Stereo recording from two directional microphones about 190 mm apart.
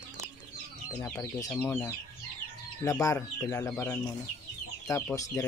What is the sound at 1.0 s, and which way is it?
Speech, 15° left (ahead or behind).